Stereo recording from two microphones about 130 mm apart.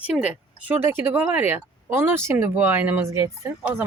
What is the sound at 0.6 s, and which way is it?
Speech, 15° right (ahead or behind).